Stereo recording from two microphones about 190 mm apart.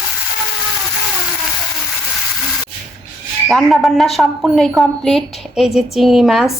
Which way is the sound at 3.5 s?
Centre (ahead or behind).